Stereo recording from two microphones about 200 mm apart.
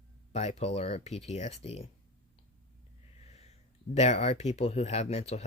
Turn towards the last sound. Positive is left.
turn(degrees=30)  # may be behind; listen again after turning